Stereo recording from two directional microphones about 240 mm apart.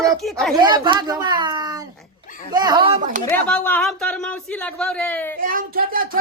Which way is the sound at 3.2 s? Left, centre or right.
Centre.